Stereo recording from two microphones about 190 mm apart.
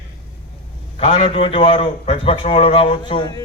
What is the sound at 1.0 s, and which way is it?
A man's voice, 25° left (ahead or behind).